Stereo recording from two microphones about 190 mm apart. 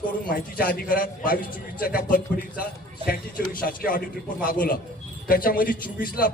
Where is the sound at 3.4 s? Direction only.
50° left (ahead or behind).